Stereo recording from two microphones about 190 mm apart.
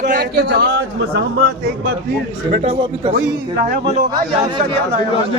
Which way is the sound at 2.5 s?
40° right (ahead or behind).